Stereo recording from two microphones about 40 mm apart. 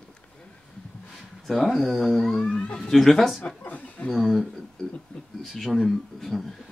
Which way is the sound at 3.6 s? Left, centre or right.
Left.